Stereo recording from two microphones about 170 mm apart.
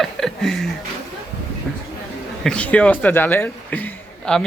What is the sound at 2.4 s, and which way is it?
Speech, 5° left (ahead or behind).